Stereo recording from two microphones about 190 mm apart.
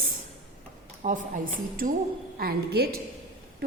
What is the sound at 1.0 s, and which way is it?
A woman's voice, 45° right (ahead or behind).